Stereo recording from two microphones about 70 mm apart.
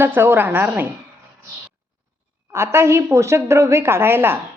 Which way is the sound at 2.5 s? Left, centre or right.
Right.